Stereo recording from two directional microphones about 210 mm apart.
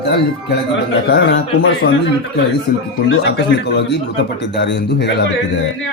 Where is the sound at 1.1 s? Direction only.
55° left (ahead or behind).